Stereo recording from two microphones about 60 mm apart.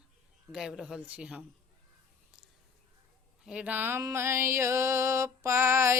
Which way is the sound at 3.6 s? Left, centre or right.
Right.